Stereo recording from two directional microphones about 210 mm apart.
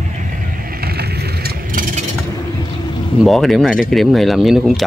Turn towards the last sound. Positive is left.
turn(degrees=0)  # may be behind; listen again after turning